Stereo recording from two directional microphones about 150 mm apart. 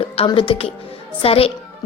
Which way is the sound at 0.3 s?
35° left (ahead or behind).